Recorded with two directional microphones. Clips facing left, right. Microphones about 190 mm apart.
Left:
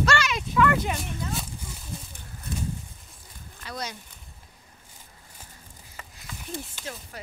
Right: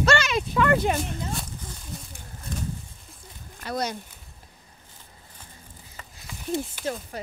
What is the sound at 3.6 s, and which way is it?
Speech, 50° right (ahead or behind).